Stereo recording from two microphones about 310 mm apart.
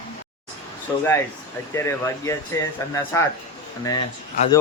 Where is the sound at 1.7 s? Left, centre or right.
Centre.